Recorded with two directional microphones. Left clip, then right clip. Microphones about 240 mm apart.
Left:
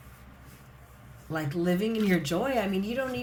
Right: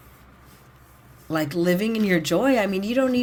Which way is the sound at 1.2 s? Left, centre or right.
Right.